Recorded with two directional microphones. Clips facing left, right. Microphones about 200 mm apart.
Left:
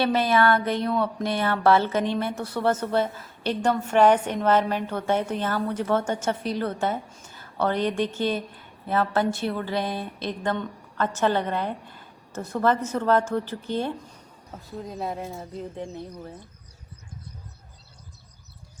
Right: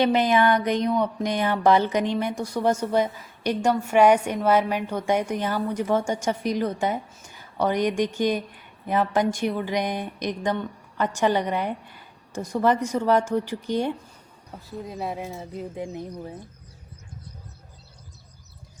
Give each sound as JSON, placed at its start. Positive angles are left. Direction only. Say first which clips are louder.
{"t": 0.0, "sound": "a woman's voice", "louder": "right 2 dB", "side_deg": -15}
{"t": 14.5, "sound": "a woman's voice", "louder": "right 1 dB", "side_deg": 0}